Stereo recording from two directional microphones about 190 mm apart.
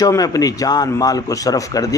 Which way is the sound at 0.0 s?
20° left (ahead or behind).